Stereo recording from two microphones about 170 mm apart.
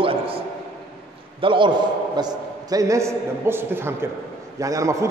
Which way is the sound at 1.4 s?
30° right (ahead or behind).